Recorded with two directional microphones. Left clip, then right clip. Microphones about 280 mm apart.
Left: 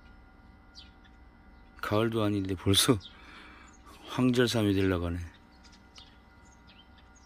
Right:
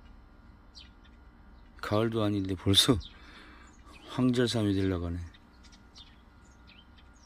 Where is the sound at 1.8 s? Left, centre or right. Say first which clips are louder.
Left 1 dB; centre.